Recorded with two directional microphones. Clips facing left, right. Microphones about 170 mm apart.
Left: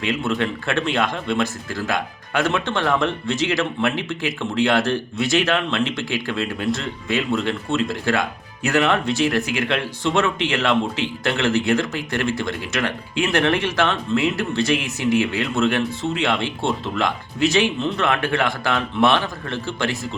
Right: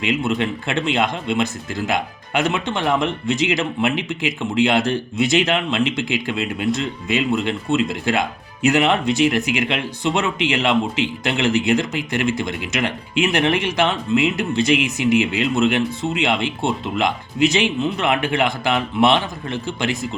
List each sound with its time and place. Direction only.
0.0 s speech: 15° right (ahead or behind)